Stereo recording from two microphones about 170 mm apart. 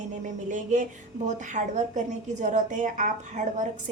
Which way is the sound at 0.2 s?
50° right (ahead or behind).